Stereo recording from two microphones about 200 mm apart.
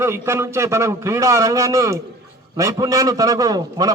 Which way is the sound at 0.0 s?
15° right (ahead or behind).